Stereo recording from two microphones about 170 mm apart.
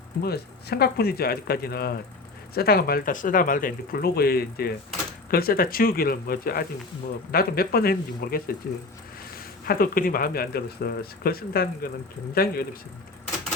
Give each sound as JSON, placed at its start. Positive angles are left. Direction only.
{"t": 0.2, "sound": "speech", "side_deg": 70}
{"t": 9.6, "sound": "speech", "side_deg": 60}